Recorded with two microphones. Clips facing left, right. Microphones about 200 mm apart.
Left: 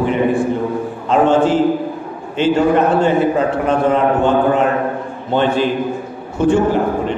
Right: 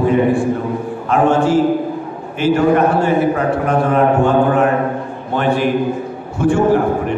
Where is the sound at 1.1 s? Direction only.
25° left (ahead or behind).